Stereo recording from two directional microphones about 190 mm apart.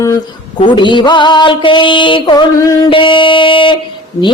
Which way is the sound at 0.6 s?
25° left (ahead or behind).